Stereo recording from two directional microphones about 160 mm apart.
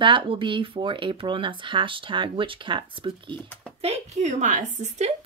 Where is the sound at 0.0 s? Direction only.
30° right (ahead or behind).